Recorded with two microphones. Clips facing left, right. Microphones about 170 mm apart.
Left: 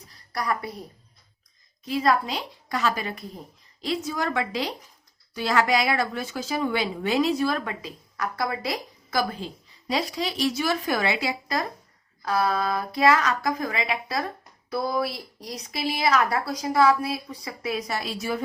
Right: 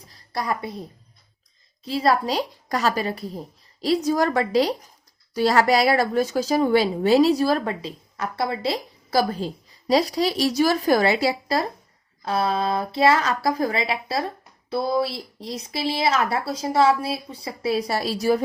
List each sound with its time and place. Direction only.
0.3 s speech: 25° right (ahead or behind)